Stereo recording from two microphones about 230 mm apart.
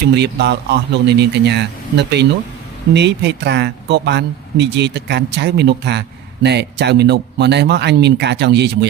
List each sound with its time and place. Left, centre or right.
0.2 s speech: right